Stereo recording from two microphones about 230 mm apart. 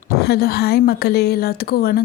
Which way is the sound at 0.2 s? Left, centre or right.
Left.